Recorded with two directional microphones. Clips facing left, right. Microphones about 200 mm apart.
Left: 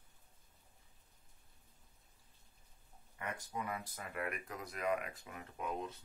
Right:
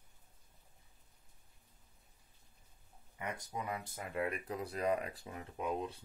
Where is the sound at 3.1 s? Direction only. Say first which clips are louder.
Right 1 dB; 20° right (ahead or behind).